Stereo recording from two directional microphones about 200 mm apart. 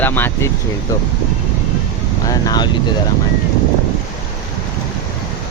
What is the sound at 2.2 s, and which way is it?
Speech, 20° left (ahead or behind).